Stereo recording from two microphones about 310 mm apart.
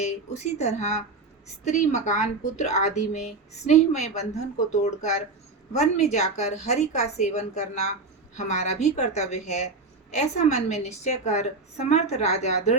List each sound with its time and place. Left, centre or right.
0.0 s speech: left